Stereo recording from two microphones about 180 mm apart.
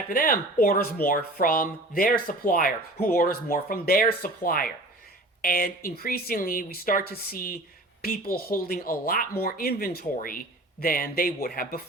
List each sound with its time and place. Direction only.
0.1 s speech: 50° left (ahead or behind)